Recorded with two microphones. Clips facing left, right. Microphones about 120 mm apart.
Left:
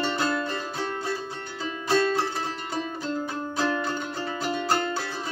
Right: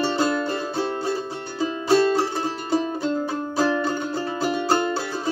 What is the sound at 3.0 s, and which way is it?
Music, 30° right (ahead or behind).